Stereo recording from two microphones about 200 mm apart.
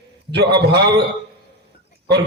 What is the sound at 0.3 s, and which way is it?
Speech, 55° right (ahead or behind).